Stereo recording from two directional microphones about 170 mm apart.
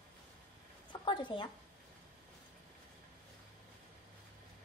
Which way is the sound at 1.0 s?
30° left (ahead or behind).